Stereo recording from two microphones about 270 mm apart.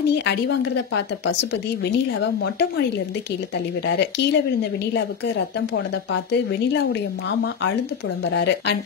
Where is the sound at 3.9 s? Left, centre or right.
Left.